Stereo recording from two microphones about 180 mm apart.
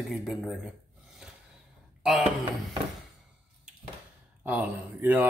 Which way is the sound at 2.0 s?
Centre (ahead or behind).